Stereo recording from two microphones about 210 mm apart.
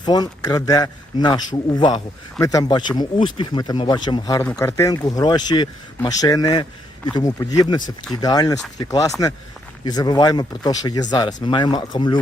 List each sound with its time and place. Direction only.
0.0 s speech: 20° left (ahead or behind)